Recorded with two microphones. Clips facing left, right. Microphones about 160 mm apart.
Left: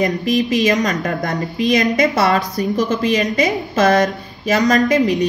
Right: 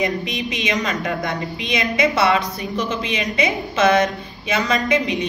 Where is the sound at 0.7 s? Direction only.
45° left (ahead or behind).